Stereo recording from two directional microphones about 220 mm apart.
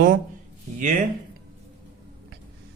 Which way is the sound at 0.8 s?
35° right (ahead or behind).